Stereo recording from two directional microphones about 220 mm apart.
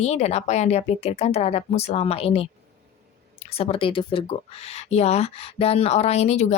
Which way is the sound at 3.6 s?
25° left (ahead or behind).